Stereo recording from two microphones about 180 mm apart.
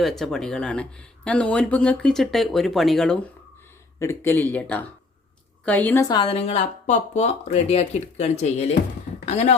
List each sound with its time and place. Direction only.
0.0 s speech: centre (ahead or behind)
4.0 s speech: 15° left (ahead or behind)
6.1 s speech: 30° left (ahead or behind)